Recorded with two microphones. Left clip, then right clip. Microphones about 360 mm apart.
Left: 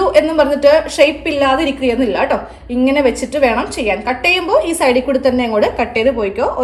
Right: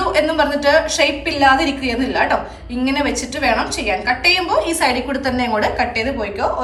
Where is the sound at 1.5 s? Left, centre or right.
Left.